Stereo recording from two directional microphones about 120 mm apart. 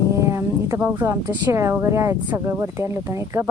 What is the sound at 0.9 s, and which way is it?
Speech, 15° right (ahead or behind).